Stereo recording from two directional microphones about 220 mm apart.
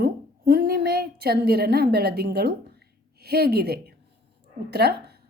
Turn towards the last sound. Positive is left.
turn(degrees=-45)  # may be behind; listen again after turning